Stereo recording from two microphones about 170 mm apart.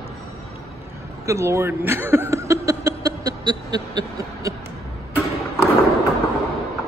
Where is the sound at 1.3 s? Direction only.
15° right (ahead or behind).